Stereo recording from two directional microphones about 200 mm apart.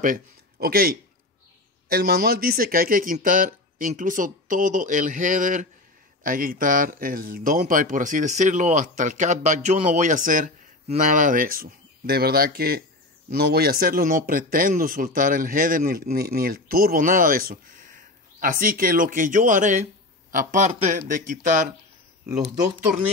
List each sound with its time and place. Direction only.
0.0 s a man's voice: 45° right (ahead or behind)